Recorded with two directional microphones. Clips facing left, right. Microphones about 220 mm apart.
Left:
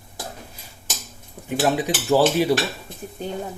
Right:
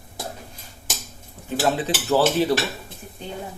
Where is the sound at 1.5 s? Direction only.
15° left (ahead or behind).